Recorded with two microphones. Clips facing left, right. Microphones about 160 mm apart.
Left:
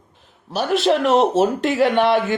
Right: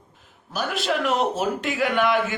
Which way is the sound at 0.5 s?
35° left (ahead or behind).